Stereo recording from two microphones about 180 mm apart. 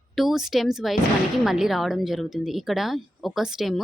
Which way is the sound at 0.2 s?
Centre (ahead or behind).